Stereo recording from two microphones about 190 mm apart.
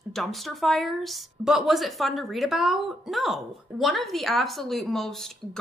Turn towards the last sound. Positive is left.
turn(degrees=0)  # may be behind; listen again after turning